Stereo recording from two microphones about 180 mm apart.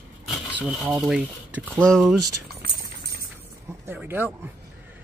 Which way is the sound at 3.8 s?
10° right (ahead or behind).